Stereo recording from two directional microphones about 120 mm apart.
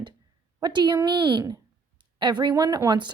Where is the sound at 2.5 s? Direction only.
30° right (ahead or behind).